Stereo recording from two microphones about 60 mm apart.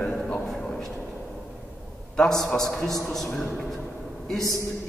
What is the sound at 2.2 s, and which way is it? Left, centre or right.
A man's voice, centre.